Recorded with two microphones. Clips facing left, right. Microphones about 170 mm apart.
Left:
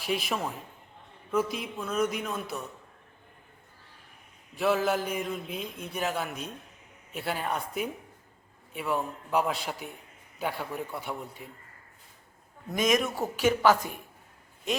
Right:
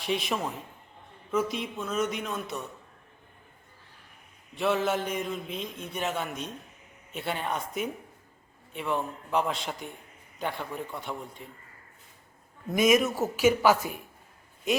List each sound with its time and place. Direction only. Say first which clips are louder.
0.0 s a man's voice: right 1 dB; 5° left (ahead or behind)
4.5 s a man's voice: left 1 dB; centre (ahead or behind)
12.6 s a man's voice: right 4 dB; 10° right (ahead or behind)